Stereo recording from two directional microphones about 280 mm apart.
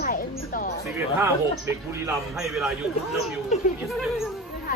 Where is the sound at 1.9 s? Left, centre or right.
Centre.